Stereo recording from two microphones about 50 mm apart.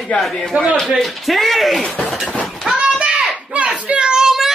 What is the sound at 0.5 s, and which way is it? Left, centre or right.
Speech, right.